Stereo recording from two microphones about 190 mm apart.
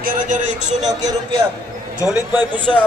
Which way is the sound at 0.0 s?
45° right (ahead or behind).